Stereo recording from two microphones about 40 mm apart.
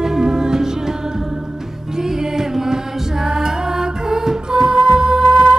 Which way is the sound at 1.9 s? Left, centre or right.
Centre.